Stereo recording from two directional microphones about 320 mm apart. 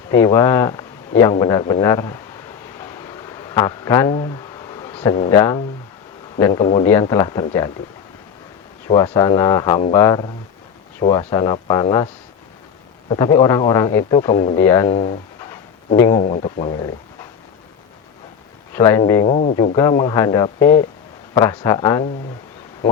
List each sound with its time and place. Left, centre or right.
0.1 s speech: centre
3.5 s speech: centre
8.9 s speech: centre
13.1 s speech: centre
14.9 s speech: left
16.0 s speech: centre
18.7 s speech: centre
19.2 s speech: left